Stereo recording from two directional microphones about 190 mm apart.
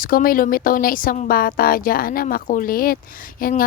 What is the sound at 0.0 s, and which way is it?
A woman's voice, 50° left (ahead or behind).